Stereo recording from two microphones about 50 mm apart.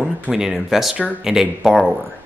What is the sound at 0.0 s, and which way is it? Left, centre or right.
Speech, centre.